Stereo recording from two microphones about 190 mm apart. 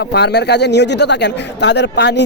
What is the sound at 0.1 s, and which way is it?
Speech, 60° left (ahead or behind).